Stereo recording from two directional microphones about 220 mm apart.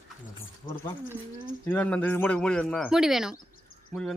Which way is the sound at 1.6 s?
5° left (ahead or behind).